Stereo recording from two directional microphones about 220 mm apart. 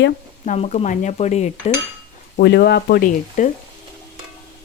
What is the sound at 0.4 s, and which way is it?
Speech, 30° left (ahead or behind).